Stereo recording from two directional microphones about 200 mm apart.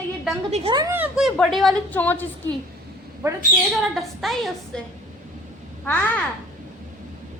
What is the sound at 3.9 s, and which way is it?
Speech, centre (ahead or behind).